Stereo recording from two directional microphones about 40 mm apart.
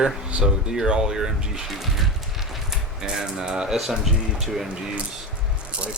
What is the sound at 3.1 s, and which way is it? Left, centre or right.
Speech, centre.